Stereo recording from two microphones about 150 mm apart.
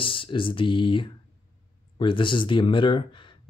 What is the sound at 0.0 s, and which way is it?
Speech, 35° left (ahead or behind).